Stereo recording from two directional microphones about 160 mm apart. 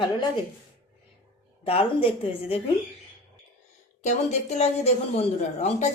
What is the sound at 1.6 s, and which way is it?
Speech, 35° left (ahead or behind).